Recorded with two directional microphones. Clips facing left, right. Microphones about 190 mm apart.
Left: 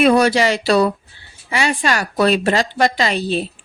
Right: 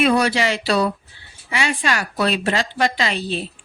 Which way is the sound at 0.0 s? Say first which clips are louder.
Left 4 dB; 45° left (ahead or behind).